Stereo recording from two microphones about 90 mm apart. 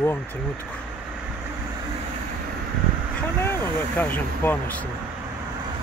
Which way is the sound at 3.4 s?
25° left (ahead or behind).